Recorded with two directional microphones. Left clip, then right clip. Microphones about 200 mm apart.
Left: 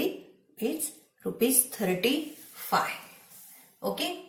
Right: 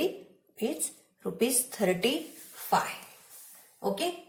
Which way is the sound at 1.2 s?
45° right (ahead or behind).